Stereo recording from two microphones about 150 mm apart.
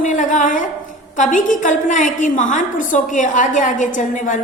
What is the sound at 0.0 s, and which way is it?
A woman's voice, 60° left (ahead or behind).